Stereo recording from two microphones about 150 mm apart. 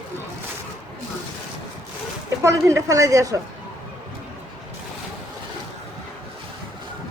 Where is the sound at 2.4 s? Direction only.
20° right (ahead or behind).